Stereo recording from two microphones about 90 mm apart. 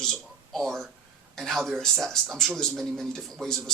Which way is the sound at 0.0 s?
5° left (ahead or behind).